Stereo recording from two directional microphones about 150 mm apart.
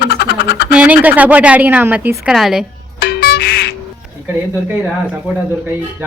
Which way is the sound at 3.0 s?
85° left.